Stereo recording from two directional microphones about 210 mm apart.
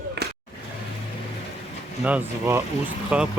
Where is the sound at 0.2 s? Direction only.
50° right (ahead or behind).